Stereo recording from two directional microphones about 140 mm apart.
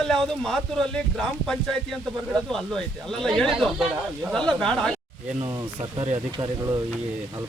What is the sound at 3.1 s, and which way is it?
Speech, 5° left (ahead or behind).